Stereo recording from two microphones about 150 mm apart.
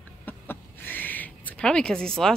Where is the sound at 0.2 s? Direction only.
10° left (ahead or behind).